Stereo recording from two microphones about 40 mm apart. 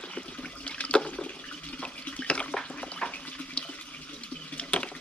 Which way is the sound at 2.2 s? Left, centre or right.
Left.